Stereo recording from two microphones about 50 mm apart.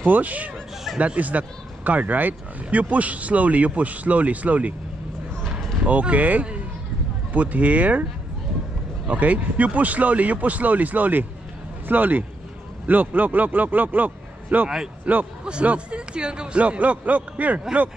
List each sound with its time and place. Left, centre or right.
0.0 s a man's voice: right
5.9 s speech: right
9.0 s a man's voice: right